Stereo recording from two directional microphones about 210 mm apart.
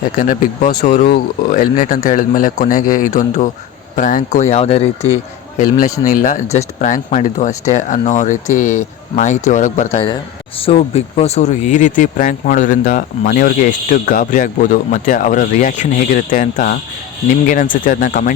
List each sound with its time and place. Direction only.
0.2 s speech: 35° left (ahead or behind)
1.0 s speech: 45° left (ahead or behind)